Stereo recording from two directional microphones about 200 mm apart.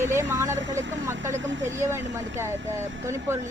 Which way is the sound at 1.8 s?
15° right (ahead or behind).